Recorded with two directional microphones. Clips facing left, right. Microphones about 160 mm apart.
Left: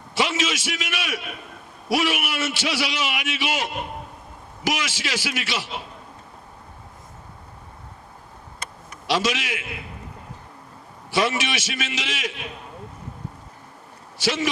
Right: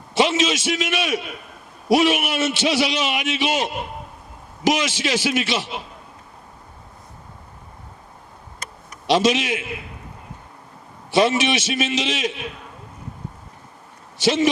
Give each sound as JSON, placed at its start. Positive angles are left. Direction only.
{"t": 0.1, "sound": "a man's voice", "side_deg": -20}
{"t": 9.0, "sound": "a man's voice", "side_deg": -20}
{"t": 11.1, "sound": "a man's voice", "side_deg": -20}
{"t": 14.2, "sound": "a man's voice", "side_deg": -20}